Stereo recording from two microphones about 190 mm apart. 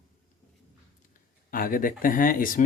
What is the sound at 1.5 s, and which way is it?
Speech, 50° left (ahead or behind).